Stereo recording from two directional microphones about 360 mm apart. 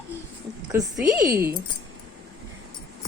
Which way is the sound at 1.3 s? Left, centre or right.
Centre.